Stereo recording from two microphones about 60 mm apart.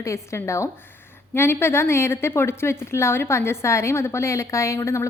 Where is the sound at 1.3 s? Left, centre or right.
Left.